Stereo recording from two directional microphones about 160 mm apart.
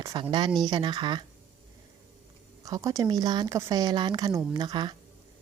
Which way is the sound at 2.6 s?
20° right (ahead or behind).